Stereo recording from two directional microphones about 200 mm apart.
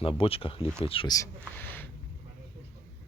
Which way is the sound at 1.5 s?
10° left (ahead or behind).